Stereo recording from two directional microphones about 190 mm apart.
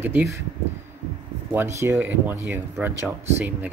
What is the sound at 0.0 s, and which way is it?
Speech, 15° right (ahead or behind).